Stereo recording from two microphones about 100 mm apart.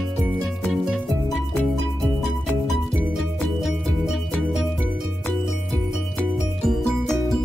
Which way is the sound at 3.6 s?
Centre (ahead or behind).